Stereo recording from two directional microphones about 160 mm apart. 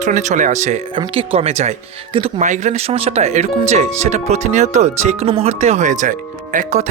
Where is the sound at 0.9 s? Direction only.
35° right (ahead or behind).